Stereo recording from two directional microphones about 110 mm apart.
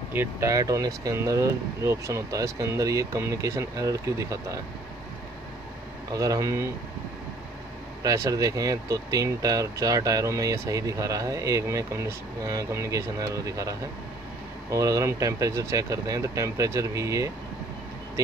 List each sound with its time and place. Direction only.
0.1 s speech: 20° right (ahead or behind)
6.1 s speech: 30° right (ahead or behind)
8.0 s speech: 30° right (ahead or behind)